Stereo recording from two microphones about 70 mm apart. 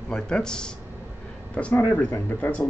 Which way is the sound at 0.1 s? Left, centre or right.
Centre.